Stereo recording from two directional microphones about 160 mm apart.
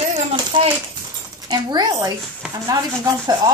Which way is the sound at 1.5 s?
25° right (ahead or behind).